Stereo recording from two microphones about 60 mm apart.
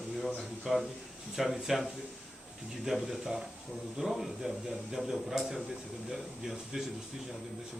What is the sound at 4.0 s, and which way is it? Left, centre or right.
A man's voice, centre.